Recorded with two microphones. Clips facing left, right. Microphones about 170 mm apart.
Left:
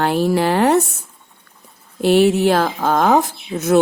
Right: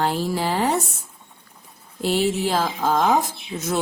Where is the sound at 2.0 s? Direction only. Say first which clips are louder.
Left 8 dB; 65° left (ahead or behind).